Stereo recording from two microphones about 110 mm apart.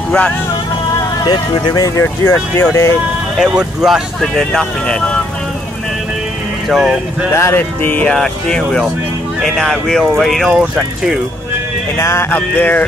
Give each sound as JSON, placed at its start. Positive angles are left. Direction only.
{"t": 1.2, "sound": "speech", "side_deg": 40}
{"t": 3.3, "sound": "speech", "side_deg": -5}
{"t": 4.4, "sound": "speech", "side_deg": 10}
{"t": 6.7, "sound": "speech", "side_deg": -5}
{"t": 7.3, "sound": "speech", "side_deg": 25}
{"t": 12.0, "sound": "speech", "side_deg": 25}